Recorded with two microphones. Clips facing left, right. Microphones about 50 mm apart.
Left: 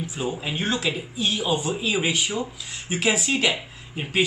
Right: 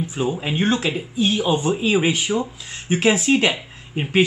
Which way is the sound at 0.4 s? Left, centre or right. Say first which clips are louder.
Right 6 dB; right.